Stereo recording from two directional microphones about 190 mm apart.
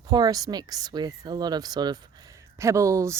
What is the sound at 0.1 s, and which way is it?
Speech, 20° right (ahead or behind).